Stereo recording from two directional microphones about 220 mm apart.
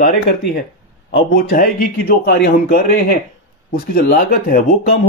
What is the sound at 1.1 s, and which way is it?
Speech, 40° left (ahead or behind).